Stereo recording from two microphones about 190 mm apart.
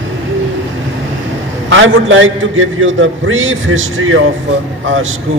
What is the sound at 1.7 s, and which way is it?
Speech, 90° right.